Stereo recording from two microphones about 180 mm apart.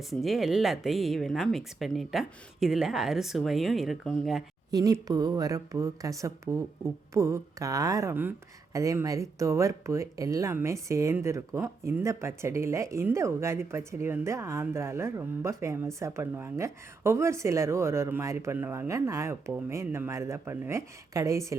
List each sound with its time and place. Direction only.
0.0 s speech: centre (ahead or behind)
4.7 s speech: 20° right (ahead or behind)